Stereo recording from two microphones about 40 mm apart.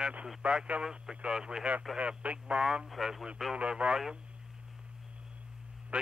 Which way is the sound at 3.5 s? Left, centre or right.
Right.